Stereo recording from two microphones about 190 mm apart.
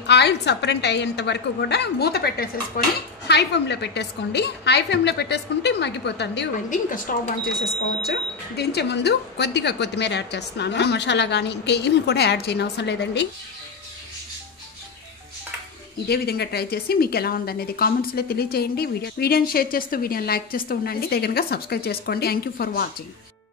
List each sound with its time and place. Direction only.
0.0 s speech: 65° left (ahead or behind)
2.8 s a woman's voice: 45° left (ahead or behind)
3.3 s speech: 65° left (ahead or behind)
6.7 s a woman's voice: 45° left (ahead or behind)
8.1 s speech: 60° left (ahead or behind)
16.1 s a woman's voice: 55° left (ahead or behind)